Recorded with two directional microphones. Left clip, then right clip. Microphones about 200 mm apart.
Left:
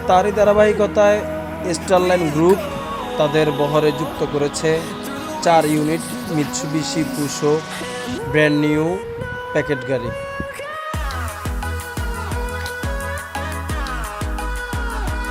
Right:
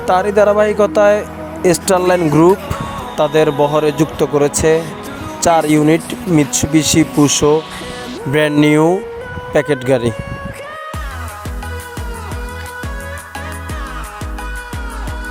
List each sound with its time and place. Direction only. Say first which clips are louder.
0.1 s speech: right 3 dB; 45° right (ahead or behind)